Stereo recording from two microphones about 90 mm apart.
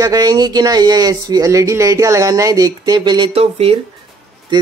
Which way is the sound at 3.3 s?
90° right.